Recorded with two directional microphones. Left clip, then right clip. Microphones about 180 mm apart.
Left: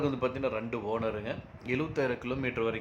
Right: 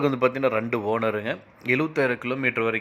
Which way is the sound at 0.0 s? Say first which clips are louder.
Right 9 dB; 35° right (ahead or behind).